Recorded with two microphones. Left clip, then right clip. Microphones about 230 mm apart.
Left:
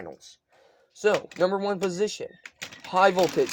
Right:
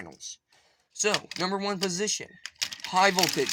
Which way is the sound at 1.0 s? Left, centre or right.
Right.